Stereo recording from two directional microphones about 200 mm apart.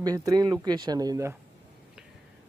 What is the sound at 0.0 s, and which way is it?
Speech, 15° right (ahead or behind).